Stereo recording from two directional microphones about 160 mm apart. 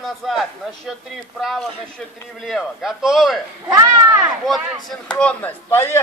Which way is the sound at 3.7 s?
20° right (ahead or behind).